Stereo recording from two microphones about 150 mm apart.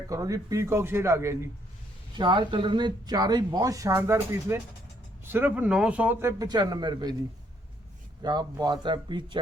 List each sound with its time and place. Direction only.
0.1 s speech: 20° right (ahead or behind)
2.1 s speech: 30° right (ahead or behind)
8.2 s speech: 25° right (ahead or behind)